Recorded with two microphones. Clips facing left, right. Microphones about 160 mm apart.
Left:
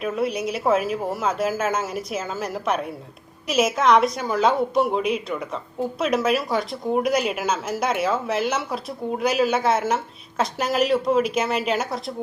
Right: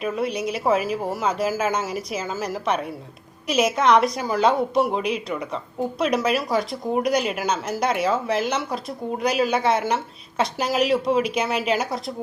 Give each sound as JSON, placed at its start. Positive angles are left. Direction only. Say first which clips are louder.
{"t": 0.0, "sound": "speech", "louder": "left 1 dB", "side_deg": 0}